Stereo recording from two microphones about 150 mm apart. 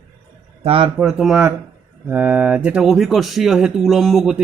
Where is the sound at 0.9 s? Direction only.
5° right (ahead or behind).